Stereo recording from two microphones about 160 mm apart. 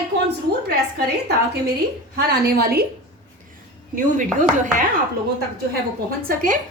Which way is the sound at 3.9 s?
55° right (ahead or behind).